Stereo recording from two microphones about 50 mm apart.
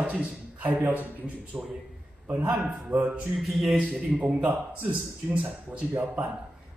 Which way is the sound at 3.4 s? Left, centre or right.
Centre.